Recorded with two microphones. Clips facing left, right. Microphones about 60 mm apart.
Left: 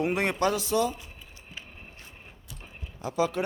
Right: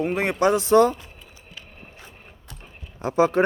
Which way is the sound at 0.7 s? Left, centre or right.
Right.